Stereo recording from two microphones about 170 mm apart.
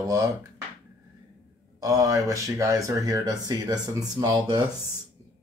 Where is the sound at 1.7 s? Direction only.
20° right (ahead or behind).